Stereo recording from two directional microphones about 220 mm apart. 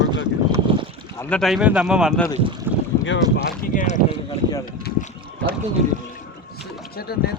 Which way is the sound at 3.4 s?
40° left (ahead or behind).